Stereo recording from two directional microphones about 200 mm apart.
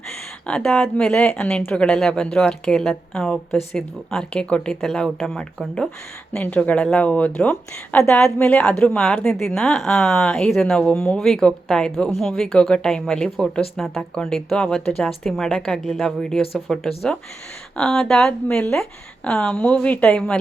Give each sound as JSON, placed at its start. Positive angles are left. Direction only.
{"t": 0.4, "sound": "speech", "side_deg": 5}